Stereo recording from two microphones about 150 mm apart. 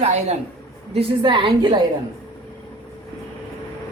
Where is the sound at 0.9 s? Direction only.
30° right (ahead or behind).